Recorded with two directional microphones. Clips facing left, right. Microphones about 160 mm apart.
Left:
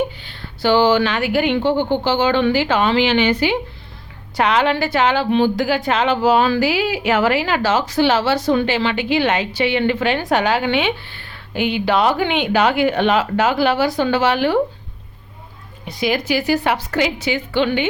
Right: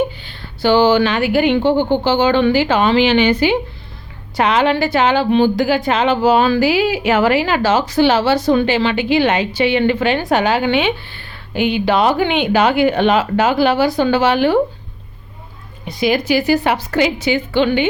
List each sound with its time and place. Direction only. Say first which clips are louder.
0.6 s a woman's voice: right 2 dB; 30° right (ahead or behind)
16.1 s a woman's voice: right 3 dB; 30° right (ahead or behind)